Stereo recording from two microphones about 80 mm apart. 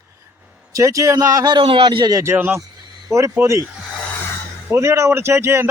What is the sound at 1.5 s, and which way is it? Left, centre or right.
Speech, right.